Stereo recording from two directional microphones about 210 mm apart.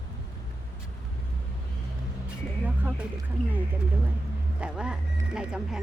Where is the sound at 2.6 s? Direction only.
5° right (ahead or behind).